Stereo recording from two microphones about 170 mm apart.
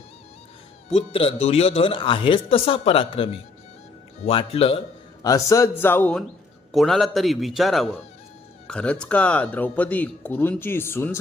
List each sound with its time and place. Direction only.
0.9 s speech: 35° left (ahead or behind)
4.3 s speech: 35° left (ahead or behind)
5.2 s a man's voice: 20° left (ahead or behind)